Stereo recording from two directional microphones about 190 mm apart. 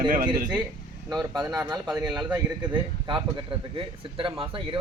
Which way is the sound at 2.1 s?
20° right (ahead or behind).